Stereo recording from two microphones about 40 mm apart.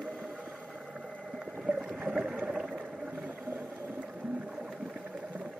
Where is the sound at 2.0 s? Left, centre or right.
Right.